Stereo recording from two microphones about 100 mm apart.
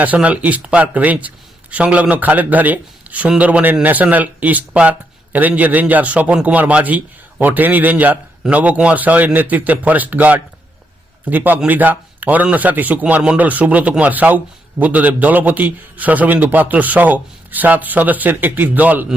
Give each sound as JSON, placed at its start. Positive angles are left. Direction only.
{"t": 0.0, "sound": "speech", "side_deg": -15}